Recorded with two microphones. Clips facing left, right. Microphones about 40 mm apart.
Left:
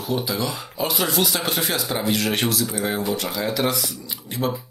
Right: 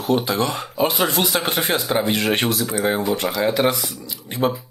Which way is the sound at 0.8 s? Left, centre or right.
Right.